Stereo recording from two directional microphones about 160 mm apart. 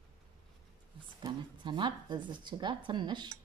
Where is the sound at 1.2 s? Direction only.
30° right (ahead or behind).